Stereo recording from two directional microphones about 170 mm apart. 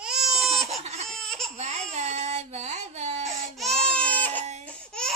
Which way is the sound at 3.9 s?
5° left (ahead or behind).